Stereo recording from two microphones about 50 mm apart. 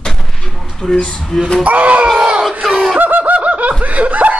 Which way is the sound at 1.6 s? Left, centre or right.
Right.